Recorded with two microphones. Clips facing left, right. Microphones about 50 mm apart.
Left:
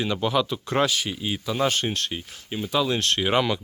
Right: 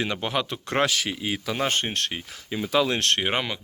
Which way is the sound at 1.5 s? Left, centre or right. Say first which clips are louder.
Left 3 dB; right.